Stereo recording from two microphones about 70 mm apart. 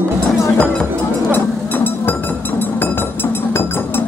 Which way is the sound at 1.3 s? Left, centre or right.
Left.